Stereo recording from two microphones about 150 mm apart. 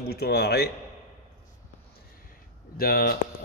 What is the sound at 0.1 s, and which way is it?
Speech, 90° left.